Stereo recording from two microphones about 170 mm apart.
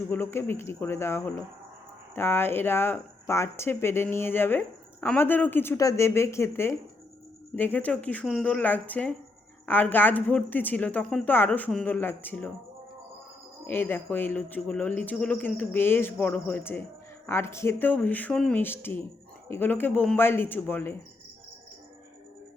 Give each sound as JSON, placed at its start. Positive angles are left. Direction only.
{"t": 0.1, "sound": "speech", "side_deg": 15}
{"t": 13.7, "sound": "speech", "side_deg": 10}